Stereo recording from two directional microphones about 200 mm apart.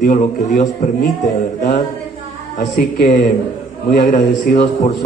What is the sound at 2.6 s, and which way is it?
A man's voice, 40° left (ahead or behind).